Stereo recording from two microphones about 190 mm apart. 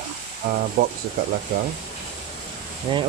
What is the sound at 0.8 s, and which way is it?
Speech, 50° right (ahead or behind).